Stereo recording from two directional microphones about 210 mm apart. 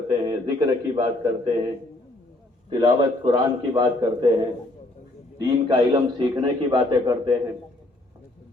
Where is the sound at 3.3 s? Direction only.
20° right (ahead or behind).